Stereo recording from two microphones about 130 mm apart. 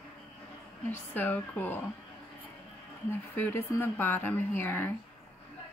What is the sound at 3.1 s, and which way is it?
A woman's voice, 15° left (ahead or behind).